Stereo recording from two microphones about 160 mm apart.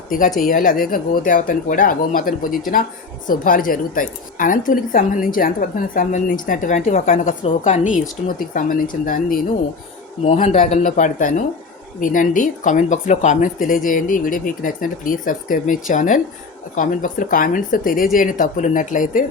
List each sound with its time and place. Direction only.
0.3 s speech: 60° left (ahead or behind)
10.2 s speech: 45° left (ahead or behind)